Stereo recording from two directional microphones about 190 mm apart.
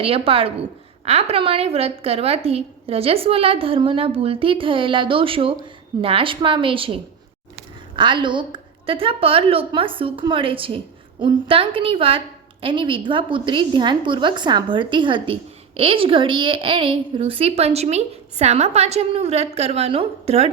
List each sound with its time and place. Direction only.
0.0 s a woman's voice: 30° right (ahead or behind)